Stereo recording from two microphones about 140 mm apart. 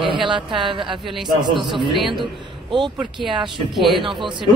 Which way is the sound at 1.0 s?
Centre (ahead or behind).